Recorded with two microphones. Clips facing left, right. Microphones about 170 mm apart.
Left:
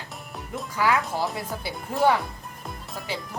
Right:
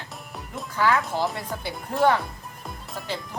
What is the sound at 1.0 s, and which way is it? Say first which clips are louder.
Speech: right 1 dB; centre (ahead or behind).